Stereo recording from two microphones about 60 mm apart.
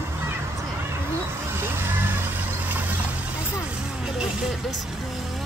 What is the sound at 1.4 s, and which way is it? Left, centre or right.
Vehicle, right.